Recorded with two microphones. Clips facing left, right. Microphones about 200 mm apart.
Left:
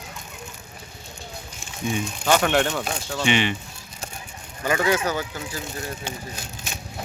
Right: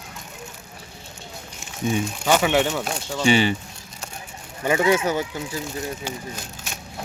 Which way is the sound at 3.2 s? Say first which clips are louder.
Right 4 dB; 35° right (ahead or behind).